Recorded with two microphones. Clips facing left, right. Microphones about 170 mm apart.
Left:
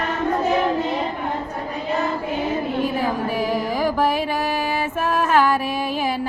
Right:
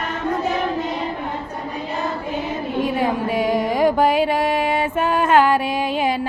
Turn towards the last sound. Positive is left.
turn(degrees=-30)  # may be behind; listen again after turning